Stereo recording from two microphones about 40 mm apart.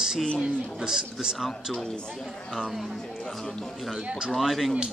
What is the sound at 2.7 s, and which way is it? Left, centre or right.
Speech, centre.